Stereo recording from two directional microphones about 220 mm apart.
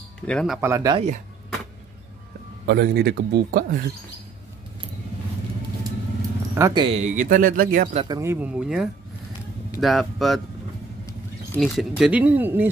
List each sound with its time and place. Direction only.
0.3 s speech: 5° left (ahead or behind)
0.6 s speech: 15° right (ahead or behind)
0.9 s speech: 30° right (ahead or behind)
2.6 s speech: 45° right (ahead or behind)
6.5 s speech: 15° right (ahead or behind); by 8.0 s 40° right (ahead or behind)
8.0 s speech: 15° right (ahead or behind); by 10.4 s centre (ahead or behind)
11.6 s speech: centre (ahead or behind)